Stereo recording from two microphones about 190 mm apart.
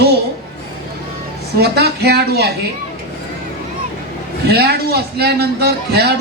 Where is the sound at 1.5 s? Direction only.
60° right (ahead or behind).